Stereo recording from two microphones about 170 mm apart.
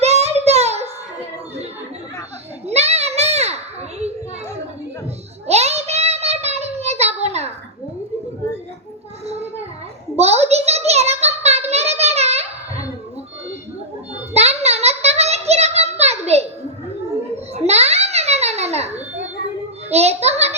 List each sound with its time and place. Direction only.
0.0 s child singing: 40° right (ahead or behind)
2.6 s children playing: 40° right (ahead or behind)
5.5 s child singing: 40° right (ahead or behind)
10.2 s a sound: 40° right (ahead or behind)
14.1 s child singing: 40° right (ahead or behind)
17.5 s a sound: 40° right (ahead or behind)